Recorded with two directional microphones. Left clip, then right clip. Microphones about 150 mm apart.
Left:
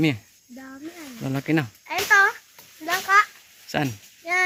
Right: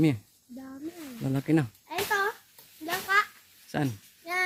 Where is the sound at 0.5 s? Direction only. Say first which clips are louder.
Left 3 dB; 25° left (ahead or behind).